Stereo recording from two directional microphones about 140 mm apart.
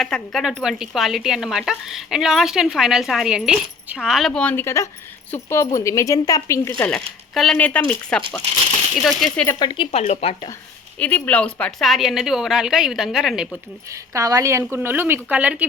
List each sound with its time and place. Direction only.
0.0 s speech: centre (ahead or behind); by 6.9 s 15° left (ahead or behind)
6.9 s speech: 5° left (ahead or behind)
9.6 s speech: 35° left (ahead or behind)
10.0 s speech: 50° left (ahead or behind)
10.9 s speech: 10° left (ahead or behind); by 13.6 s 5° right (ahead or behind)
13.8 s a woman's voice: 20° right (ahead or behind)